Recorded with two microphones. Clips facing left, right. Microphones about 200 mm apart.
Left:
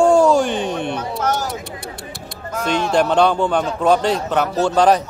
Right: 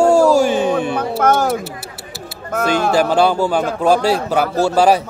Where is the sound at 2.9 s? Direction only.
5° right (ahead or behind).